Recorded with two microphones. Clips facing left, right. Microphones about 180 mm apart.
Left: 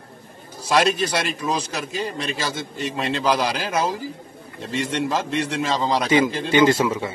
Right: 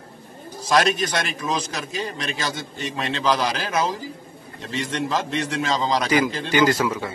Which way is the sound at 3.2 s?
5° left (ahead or behind).